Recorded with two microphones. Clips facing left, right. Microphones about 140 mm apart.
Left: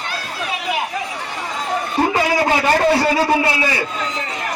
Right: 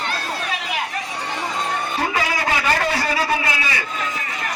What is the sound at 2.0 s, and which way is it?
A man's voice, 30° left (ahead or behind).